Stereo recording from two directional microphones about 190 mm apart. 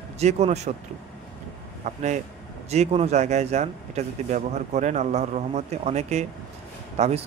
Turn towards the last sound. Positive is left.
turn(degrees=-35)  # may be behind; listen again after turning